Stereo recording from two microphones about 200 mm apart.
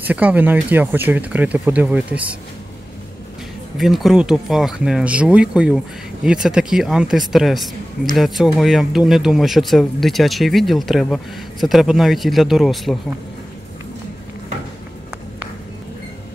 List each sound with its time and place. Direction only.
0.0 s speech: 10° right (ahead or behind)
3.7 s speech: centre (ahead or behind)